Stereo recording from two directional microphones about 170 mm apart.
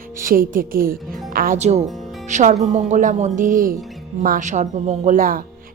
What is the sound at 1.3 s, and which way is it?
Music, 55° right (ahead or behind).